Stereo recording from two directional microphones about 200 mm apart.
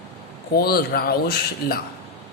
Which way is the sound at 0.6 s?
50° left (ahead or behind).